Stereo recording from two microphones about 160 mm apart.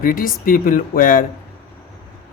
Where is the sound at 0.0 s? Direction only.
60° left (ahead or behind).